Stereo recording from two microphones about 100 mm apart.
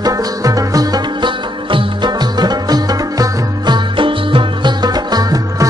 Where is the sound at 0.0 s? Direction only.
35° right (ahead or behind).